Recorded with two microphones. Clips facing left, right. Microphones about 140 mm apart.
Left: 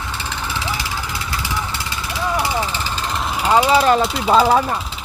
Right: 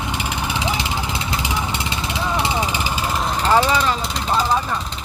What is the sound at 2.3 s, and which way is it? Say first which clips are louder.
Vehicle: even; 20° right (ahead or behind).